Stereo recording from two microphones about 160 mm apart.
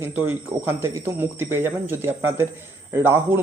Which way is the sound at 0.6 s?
15° right (ahead or behind).